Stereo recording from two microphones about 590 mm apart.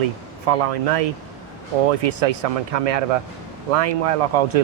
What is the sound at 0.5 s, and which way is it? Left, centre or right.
Speech, right.